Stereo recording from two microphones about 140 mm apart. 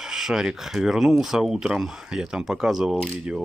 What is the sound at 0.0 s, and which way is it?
Speech, 5° right (ahead or behind).